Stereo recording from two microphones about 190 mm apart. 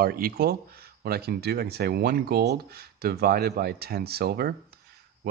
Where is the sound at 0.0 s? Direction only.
50° right (ahead or behind).